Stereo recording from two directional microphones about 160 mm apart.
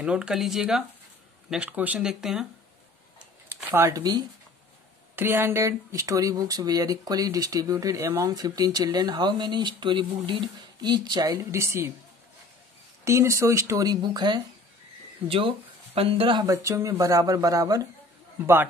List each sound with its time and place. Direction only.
0.0 s speech: 5° right (ahead or behind)
3.4 s speech: 15° right (ahead or behind)
5.1 s speech: 15° right (ahead or behind)
13.0 s speech: 20° right (ahead or behind); by 16.4 s 35° right (ahead or behind)
16.4 s speech: 20° right (ahead or behind)